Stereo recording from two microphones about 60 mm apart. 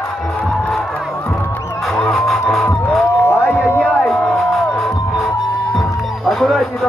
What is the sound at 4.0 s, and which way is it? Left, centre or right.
Music, centre.